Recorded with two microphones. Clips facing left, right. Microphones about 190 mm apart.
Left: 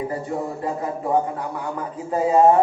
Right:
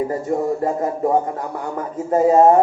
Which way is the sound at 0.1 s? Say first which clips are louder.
Right 6 dB; 45° right (ahead or behind).